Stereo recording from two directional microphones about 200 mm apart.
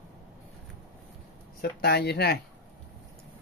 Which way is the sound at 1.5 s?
55° left (ahead or behind).